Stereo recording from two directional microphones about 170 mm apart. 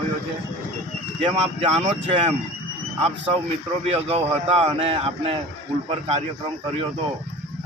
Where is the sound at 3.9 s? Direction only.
35° right (ahead or behind).